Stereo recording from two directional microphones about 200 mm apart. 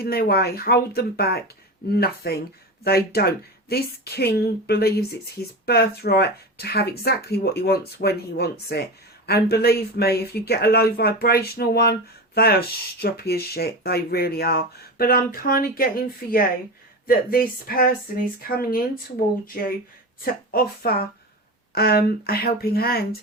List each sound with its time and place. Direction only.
0.0 s speech: 50° left (ahead or behind)
20.5 s speech: 45° left (ahead or behind)